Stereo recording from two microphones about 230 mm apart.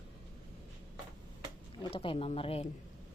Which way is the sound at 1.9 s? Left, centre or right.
Left.